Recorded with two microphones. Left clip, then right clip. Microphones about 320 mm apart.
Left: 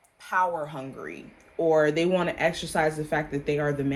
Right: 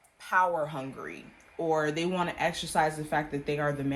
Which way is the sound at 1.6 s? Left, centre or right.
Centre.